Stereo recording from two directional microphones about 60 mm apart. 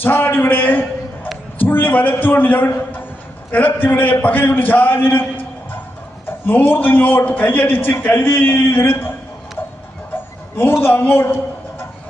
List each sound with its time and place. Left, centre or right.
0.0 s a man's voice: left
6.2 s a man's voice: left
10.7 s a man's voice: left